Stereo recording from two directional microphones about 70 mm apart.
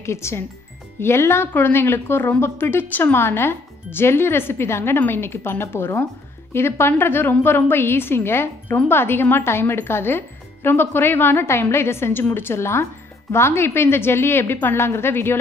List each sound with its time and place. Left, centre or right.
0.0 s a woman's voice: left